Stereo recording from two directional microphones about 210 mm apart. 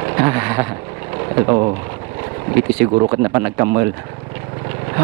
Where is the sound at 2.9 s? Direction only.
20° right (ahead or behind).